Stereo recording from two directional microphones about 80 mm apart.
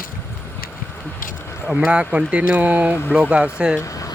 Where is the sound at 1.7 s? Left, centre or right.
Centre.